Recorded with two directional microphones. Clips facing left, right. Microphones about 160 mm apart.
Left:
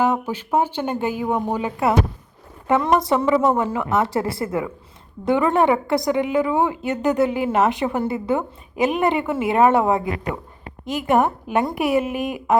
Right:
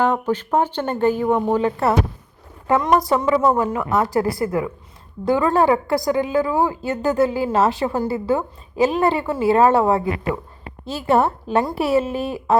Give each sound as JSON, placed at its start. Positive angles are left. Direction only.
{"t": 0.0, "sound": "a woman's voice", "side_deg": 10}